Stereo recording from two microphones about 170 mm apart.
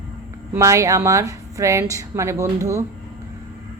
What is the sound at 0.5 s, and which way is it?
A woman's voice, 15° right (ahead or behind).